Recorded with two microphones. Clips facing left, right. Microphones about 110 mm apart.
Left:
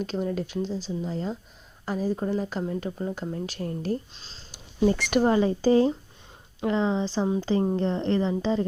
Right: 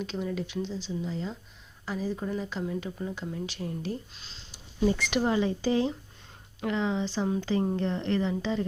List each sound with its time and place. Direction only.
0.0 s a woman's voice: 45° left (ahead or behind)
4.1 s speech: 35° left (ahead or behind)
4.9 s speech: 50° left (ahead or behind)